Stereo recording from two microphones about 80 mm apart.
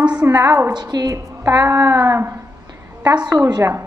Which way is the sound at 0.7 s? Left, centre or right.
Right.